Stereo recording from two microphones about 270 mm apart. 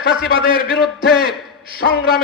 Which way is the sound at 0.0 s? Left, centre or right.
Left.